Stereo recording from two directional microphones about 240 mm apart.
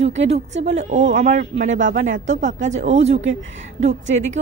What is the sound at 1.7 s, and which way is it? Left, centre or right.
Speech, right.